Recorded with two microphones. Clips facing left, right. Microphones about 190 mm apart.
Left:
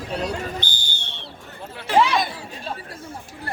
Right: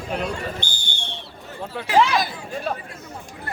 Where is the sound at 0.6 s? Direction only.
60° right (ahead or behind).